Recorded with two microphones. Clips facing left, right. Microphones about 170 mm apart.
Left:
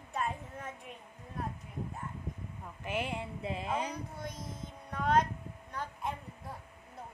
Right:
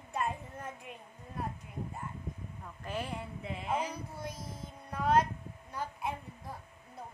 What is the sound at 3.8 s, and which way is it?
Child singing, 5° right (ahead or behind).